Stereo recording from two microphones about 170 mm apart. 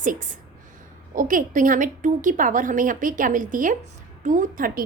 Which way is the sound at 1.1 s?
50° right (ahead or behind).